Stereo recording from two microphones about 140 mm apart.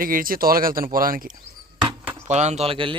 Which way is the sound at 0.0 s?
90° right.